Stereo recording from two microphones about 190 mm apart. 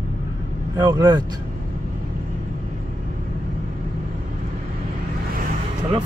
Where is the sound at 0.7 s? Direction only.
20° right (ahead or behind).